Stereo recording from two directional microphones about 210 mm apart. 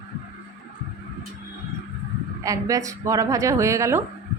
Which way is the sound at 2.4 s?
15° right (ahead or behind).